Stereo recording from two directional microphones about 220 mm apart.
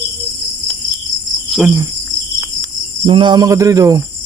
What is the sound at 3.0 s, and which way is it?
Speech, 20° right (ahead or behind).